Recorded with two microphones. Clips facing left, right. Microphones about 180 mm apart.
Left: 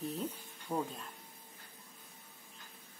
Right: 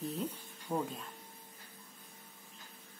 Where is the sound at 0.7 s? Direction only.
Centre (ahead or behind).